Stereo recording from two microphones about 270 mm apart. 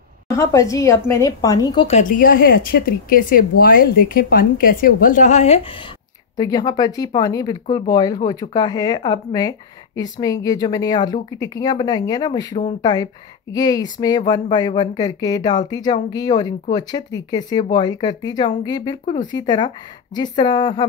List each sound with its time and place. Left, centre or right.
0.3 s a woman's voice: centre